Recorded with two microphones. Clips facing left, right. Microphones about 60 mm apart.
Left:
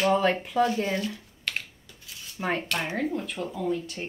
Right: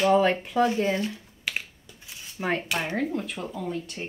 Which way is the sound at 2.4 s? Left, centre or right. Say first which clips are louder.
Right 1 dB; centre.